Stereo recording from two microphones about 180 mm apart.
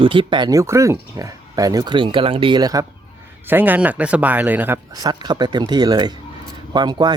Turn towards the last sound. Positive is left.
turn(degrees=-25)  # may be behind; listen again after turning